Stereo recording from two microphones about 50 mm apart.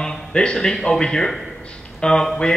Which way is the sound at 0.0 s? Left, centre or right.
Centre.